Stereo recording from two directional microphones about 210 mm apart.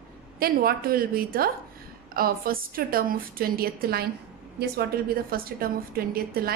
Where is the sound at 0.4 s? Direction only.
45° right (ahead or behind).